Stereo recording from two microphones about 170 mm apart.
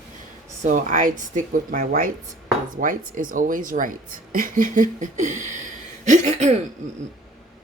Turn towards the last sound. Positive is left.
turn(degrees=-40)  # may be behind; listen again after turning